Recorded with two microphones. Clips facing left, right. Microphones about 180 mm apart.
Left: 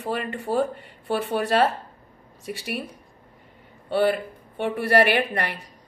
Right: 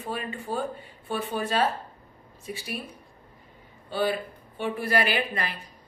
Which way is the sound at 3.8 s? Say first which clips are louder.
Left 5 dB; 70° left (ahead or behind).